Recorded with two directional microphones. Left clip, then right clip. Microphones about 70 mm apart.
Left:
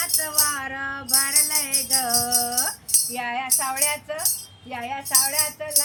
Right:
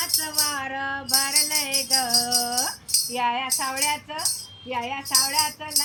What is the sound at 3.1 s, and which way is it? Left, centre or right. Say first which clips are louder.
Speech: right 7 dB; left.